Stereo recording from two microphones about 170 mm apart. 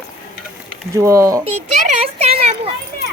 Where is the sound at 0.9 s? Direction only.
15° right (ahead or behind).